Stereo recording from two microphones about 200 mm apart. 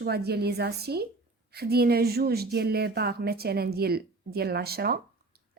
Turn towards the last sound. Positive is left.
turn(degrees=-50)  # may be behind; listen again after turning